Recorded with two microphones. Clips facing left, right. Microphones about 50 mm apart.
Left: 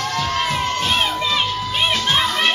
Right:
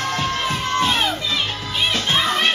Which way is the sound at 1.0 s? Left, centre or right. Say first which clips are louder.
Left 2 dB; left.